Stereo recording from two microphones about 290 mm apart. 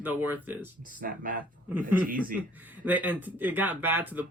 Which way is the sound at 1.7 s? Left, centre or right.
Centre.